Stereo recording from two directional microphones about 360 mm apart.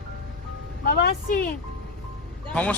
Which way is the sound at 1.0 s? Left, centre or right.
Left.